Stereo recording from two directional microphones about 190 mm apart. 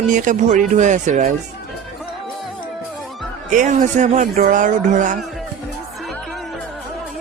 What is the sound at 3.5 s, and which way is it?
Speech, 40° right (ahead or behind).